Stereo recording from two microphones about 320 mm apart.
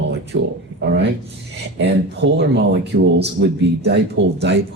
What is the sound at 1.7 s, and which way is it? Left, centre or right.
Speech, right.